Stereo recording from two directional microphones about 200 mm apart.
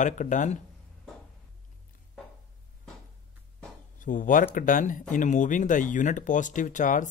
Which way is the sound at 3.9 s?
40° left (ahead or behind).